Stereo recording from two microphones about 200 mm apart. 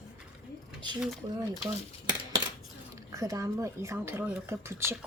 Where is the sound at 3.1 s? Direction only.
15° right (ahead or behind).